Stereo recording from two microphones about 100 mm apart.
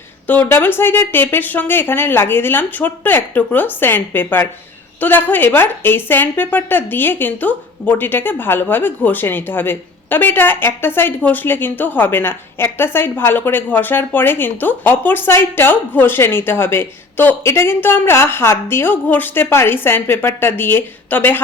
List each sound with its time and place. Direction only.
0.3 s a woman's voice: 20° left (ahead or behind)